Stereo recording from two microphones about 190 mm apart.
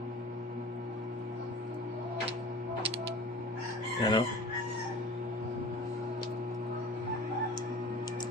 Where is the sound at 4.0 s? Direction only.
20° left (ahead or behind).